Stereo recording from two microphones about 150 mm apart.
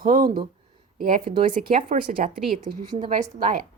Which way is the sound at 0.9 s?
70° right (ahead or behind).